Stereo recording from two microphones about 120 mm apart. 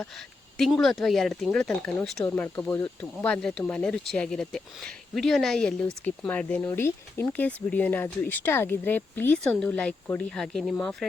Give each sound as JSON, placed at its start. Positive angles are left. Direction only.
{"t": 0.0, "sound": "speech", "side_deg": 0}
{"t": 2.3, "sound": "speech", "side_deg": 15}
{"t": 6.2, "sound": "speech", "side_deg": 15}